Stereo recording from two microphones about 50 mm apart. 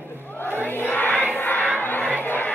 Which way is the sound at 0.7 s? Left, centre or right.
Left.